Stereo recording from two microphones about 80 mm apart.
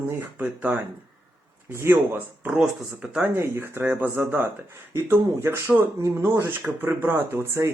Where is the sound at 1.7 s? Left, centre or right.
Right.